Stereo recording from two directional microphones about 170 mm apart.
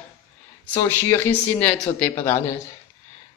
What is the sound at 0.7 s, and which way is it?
Speech, 15° left (ahead or behind).